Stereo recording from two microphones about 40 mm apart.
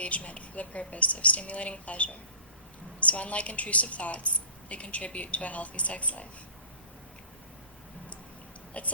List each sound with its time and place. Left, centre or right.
0.0 s a woman's voice: left
8.8 s a woman's voice: left